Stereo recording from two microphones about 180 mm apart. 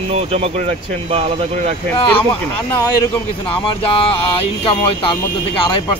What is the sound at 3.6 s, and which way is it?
Speech, 30° left (ahead or behind).